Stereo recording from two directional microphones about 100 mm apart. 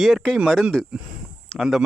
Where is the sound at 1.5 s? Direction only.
Centre (ahead or behind).